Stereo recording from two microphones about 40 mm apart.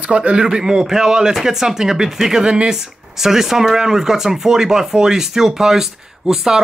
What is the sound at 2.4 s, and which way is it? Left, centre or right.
Speech, right.